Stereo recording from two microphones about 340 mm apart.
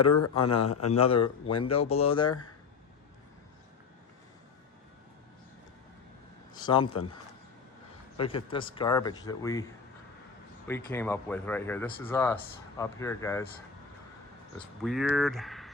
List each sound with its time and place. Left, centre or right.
0.2 s a man's voice: left
0.9 s speech: centre
6.5 s a sound: centre
8.2 s speech: centre
10.7 s speech: centre
14.8 s speech: centre